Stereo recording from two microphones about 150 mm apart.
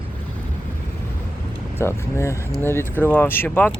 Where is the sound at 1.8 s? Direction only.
15° left (ahead or behind).